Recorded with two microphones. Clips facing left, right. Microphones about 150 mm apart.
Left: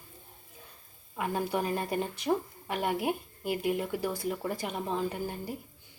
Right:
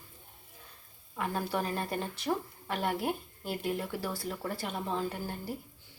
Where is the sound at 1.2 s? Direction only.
15° left (ahead or behind).